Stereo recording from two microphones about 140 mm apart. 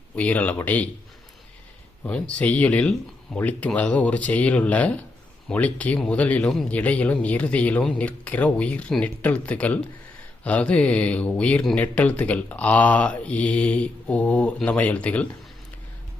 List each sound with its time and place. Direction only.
0.2 s speech: 10° left (ahead or behind)
2.0 s speech: 10° left (ahead or behind)